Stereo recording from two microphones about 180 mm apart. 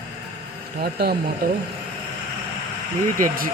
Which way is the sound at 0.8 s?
60° right (ahead or behind).